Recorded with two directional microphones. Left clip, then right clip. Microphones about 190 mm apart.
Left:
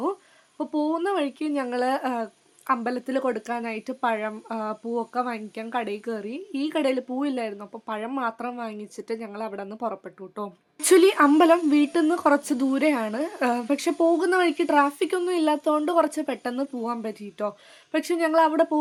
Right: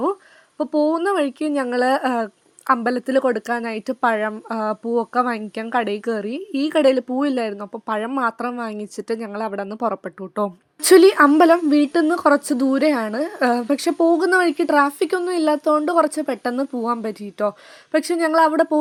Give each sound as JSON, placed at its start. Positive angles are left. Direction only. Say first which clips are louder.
{"t": 0.6, "sound": "speech", "louder": "right 7 dB", "side_deg": -35}
{"t": 10.8, "sound": "a woman's voice", "louder": "right 6 dB", "side_deg": -30}